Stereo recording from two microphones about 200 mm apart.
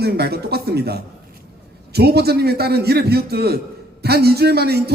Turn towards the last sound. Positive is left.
turn(degrees=-50)  # may be behind; listen again after turning